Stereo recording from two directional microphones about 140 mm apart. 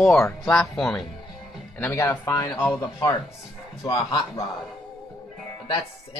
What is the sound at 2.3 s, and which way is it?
Speech, 35° left (ahead or behind).